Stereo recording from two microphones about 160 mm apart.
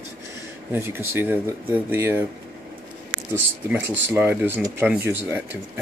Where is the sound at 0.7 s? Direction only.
15° right (ahead or behind).